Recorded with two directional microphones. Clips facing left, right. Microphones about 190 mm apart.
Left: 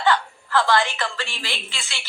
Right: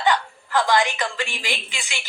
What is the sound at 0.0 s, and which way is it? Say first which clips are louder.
A woman's voice: even; 15° right (ahead or behind).